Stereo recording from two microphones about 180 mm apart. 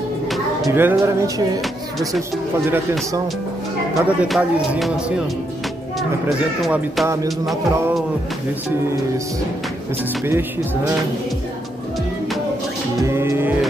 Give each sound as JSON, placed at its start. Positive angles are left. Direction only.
{"t": 0.7, "sound": "music", "side_deg": -15}
{"t": 1.6, "sound": "speech", "side_deg": 0}
{"t": 3.9, "sound": "speech", "side_deg": -5}
{"t": 10.2, "sound": "music", "side_deg": -15}
{"t": 13.0, "sound": "music", "side_deg": -15}